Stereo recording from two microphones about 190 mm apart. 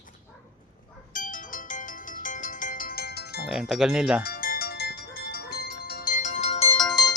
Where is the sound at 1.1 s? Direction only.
45° left (ahead or behind).